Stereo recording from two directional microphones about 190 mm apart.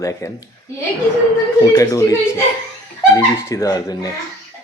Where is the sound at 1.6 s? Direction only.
15° left (ahead or behind).